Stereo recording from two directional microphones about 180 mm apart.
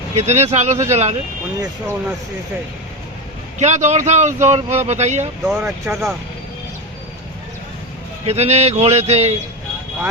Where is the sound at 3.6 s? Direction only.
40° right (ahead or behind).